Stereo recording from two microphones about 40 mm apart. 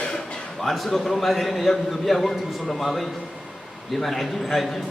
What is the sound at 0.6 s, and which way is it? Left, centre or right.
A man's voice, centre.